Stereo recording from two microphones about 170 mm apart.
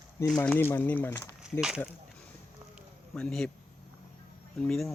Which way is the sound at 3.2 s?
5° left (ahead or behind).